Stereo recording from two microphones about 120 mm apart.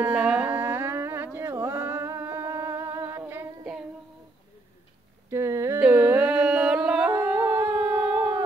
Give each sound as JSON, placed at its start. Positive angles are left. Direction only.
{"t": 0.0, "sound": "music", "side_deg": -10}
{"t": 5.3, "sound": "a sound", "side_deg": -20}
{"t": 7.1, "sound": "howl", "side_deg": -15}